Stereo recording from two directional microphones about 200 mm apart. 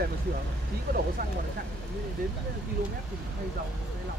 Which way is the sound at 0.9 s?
50° right (ahead or behind).